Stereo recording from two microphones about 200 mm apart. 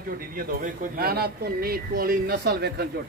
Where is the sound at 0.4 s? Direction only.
45° right (ahead or behind).